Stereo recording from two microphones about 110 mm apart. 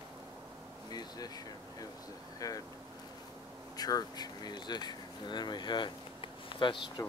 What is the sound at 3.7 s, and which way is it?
Speech, 35° left (ahead or behind).